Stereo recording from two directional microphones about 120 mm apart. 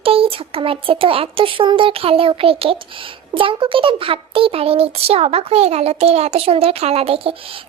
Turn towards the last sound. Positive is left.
turn(degrees=-50)  # may be behind; listen again after turning